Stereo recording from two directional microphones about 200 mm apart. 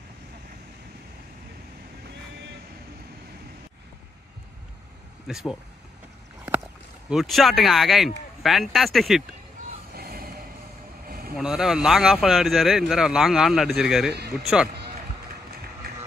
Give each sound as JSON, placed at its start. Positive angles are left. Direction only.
{"t": 5.3, "sound": "speech", "side_deg": 0}
{"t": 7.1, "sound": "speech", "side_deg": 0}
{"t": 9.9, "sound": "music", "side_deg": -50}
{"t": 11.1, "sound": "vehicle", "side_deg": -50}
{"t": 11.3, "sound": "speech", "side_deg": -5}